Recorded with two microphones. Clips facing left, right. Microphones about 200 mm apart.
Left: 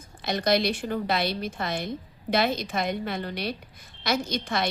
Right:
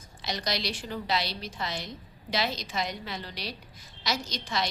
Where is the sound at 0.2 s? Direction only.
55° left (ahead or behind).